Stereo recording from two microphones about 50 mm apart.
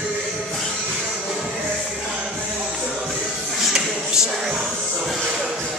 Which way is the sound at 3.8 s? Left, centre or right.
Centre.